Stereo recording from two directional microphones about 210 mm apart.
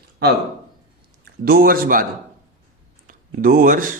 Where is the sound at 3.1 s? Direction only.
40° right (ahead or behind).